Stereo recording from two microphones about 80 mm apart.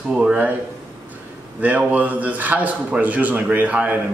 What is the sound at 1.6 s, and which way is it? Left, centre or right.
Speech, centre.